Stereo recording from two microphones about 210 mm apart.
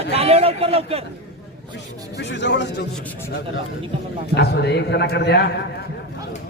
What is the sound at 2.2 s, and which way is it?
Speech, 55° left (ahead or behind).